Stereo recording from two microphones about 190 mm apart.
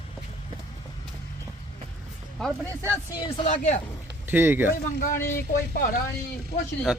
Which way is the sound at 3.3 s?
40° left (ahead or behind).